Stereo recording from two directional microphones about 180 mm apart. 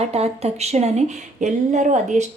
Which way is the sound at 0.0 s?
35° right (ahead or behind).